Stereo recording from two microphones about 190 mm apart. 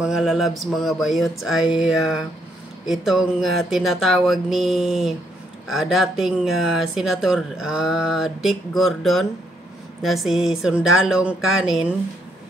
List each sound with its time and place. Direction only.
0.0 s speech: 5° right (ahead or behind)